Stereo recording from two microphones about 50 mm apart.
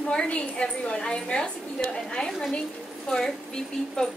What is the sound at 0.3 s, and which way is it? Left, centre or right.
A woman's voice, left.